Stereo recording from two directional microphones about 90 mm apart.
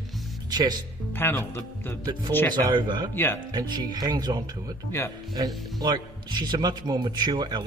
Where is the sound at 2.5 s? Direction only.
55° right (ahead or behind).